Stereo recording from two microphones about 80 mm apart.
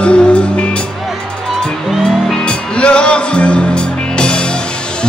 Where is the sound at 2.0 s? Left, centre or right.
Centre.